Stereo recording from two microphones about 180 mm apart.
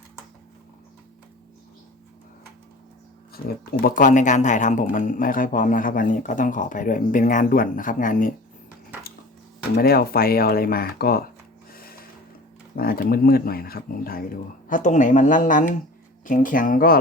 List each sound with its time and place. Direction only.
3.3 s speech: 55° left (ahead or behind)
9.7 s speech: 55° left (ahead or behind)
11.7 s a sound: 55° left (ahead or behind)
12.7 s speech: 55° left (ahead or behind)
14.7 s speech: 45° left (ahead or behind)